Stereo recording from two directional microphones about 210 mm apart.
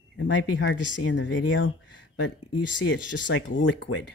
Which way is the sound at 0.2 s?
60° left (ahead or behind).